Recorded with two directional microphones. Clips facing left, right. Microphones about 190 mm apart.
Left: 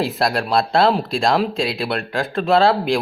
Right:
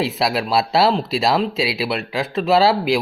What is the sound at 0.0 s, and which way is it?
Speech, centre (ahead or behind).